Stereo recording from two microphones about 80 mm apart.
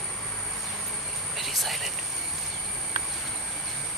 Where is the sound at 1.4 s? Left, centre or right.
Centre.